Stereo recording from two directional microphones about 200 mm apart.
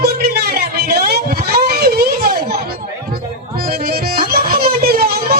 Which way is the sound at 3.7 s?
50° right (ahead or behind).